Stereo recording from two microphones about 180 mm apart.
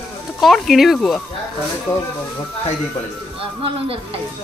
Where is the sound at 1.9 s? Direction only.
15° left (ahead or behind).